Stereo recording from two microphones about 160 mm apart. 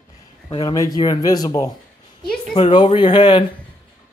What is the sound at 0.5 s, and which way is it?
Speech, 25° left (ahead or behind).